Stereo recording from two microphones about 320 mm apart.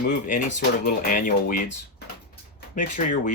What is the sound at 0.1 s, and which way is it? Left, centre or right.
Speech, left.